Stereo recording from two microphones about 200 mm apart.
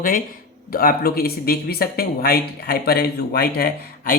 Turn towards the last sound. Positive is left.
turn(degrees=50)  # may be behind; listen again after turning